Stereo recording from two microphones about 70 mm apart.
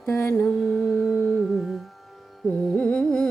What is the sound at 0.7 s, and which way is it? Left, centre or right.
Music, centre.